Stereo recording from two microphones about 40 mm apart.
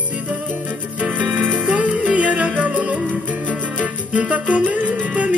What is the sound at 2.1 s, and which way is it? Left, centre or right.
Yodeling, right.